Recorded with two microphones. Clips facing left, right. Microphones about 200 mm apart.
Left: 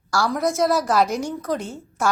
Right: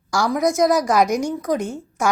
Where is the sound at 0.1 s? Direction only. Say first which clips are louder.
Right 3 dB; 15° right (ahead or behind).